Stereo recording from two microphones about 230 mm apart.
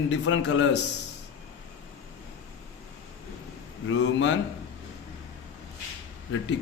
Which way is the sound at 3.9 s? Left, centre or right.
Left.